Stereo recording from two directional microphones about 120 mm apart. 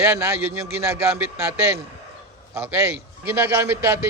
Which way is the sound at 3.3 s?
15° right (ahead or behind).